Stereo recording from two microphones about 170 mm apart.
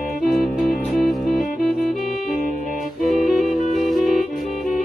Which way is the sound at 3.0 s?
Centre (ahead or behind).